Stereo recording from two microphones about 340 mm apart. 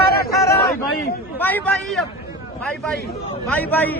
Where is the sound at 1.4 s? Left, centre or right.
Centre.